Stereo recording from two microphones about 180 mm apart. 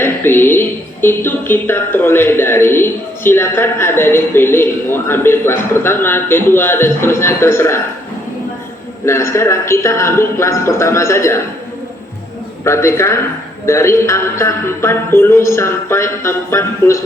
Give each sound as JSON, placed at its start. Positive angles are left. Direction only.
{"t": 0.0, "sound": "speech", "side_deg": 10}
{"t": 9.0, "sound": "speech", "side_deg": 15}
{"t": 12.6, "sound": "speech", "side_deg": 15}